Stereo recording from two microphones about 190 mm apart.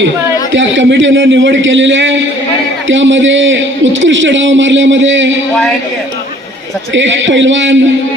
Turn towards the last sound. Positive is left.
turn(degrees=-80)